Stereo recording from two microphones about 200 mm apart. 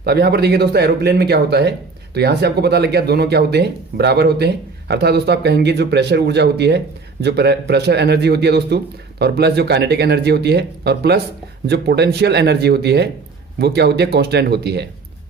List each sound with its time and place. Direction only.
0.0 s speech: 55° right (ahead or behind)